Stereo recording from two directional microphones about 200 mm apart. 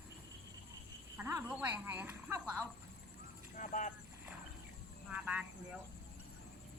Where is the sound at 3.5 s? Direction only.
40° left (ahead or behind).